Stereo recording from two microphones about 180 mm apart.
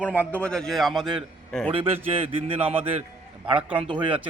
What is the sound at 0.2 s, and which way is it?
A man's voice, 10° left (ahead or behind).